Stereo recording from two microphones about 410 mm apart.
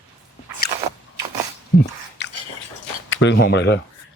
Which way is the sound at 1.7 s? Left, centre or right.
Left.